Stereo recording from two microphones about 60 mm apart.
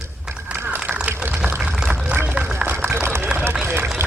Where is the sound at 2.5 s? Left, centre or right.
Right.